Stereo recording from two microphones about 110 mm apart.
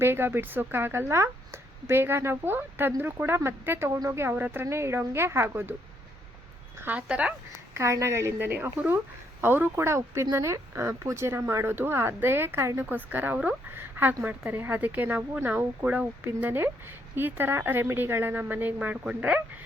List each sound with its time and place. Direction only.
0.0 s speech: 20° right (ahead or behind)
6.7 s speech: 15° right (ahead or behind)
7.7 s speech: 25° right (ahead or behind)